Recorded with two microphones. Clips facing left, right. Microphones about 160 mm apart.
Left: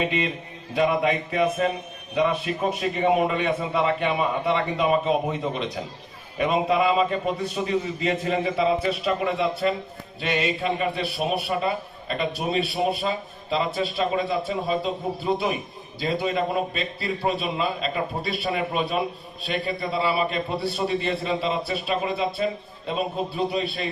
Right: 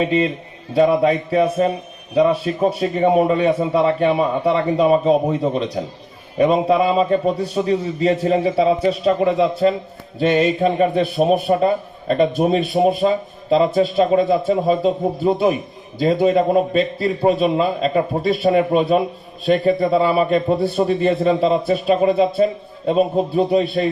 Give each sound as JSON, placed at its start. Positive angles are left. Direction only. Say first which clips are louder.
{"t": 0.0, "sound": "a man's voice", "louder": "right 7 dB", "side_deg": -35}